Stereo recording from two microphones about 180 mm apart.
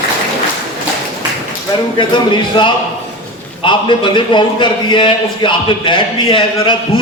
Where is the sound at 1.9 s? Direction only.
25° left (ahead or behind).